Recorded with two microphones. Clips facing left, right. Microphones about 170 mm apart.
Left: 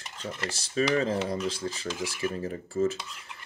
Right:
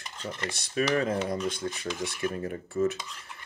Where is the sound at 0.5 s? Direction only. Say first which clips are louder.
Left 1 dB; 30° left (ahead or behind).